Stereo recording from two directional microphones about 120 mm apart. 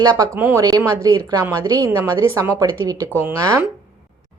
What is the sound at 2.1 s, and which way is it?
Speech, 30° right (ahead or behind).